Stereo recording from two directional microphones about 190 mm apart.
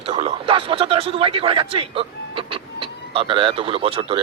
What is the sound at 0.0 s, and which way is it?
A man's voice, 30° right (ahead or behind).